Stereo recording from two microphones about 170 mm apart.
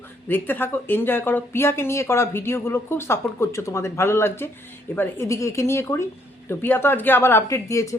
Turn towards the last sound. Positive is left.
turn(degrees=20)  # may be behind; listen again after turning